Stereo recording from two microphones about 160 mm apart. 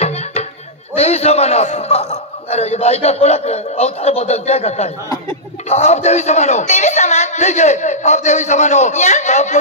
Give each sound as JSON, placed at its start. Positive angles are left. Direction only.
{"t": 0.0, "sound": "music", "side_deg": 40}
{"t": 0.9, "sound": "a man's voice", "side_deg": 40}